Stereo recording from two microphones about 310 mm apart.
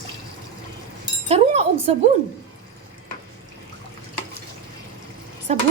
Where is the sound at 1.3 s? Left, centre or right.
Centre.